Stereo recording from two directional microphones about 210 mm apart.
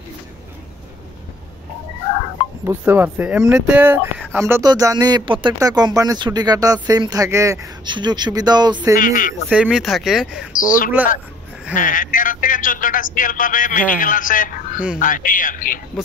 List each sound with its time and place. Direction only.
2.6 s speech: 10° right (ahead or behind)
8.9 s speech: 40° left (ahead or behind)
9.5 s speech: 5° right (ahead or behind)
10.5 s speech: 40° left (ahead or behind)